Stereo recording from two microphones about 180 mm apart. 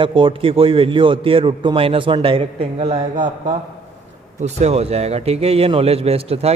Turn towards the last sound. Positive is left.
turn(degrees=-35)  # may be behind; listen again after turning